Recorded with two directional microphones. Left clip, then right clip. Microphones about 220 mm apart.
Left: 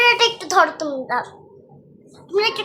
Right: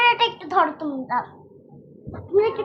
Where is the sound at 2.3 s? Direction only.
50° left (ahead or behind).